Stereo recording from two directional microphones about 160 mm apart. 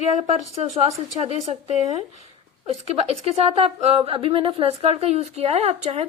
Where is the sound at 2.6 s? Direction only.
40° right (ahead or behind).